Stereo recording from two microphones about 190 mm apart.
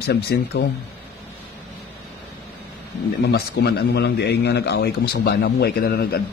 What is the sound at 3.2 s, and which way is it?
A man's voice, 60° left (ahead or behind).